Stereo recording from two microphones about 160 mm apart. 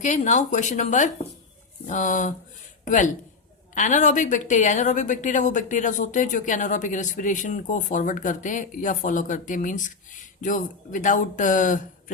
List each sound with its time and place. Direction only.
0.0 s a woman's voice: 50° left (ahead or behind)